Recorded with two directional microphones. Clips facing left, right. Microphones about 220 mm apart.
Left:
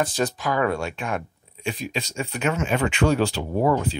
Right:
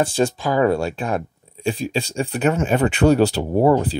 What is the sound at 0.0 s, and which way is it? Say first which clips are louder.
Speech: right 5 dB; 30° right (ahead or behind).